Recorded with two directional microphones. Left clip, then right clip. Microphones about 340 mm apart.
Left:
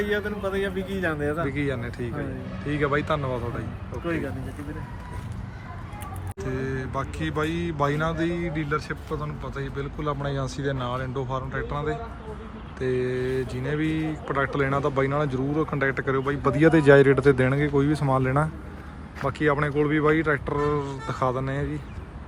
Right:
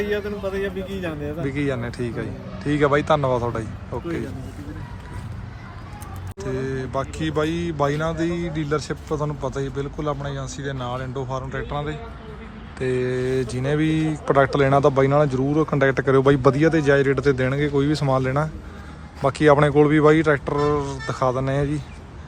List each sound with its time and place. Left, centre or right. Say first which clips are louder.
0.0 s a man's voice: right 2 dB; centre
6.4 s speech: right 4 dB; centre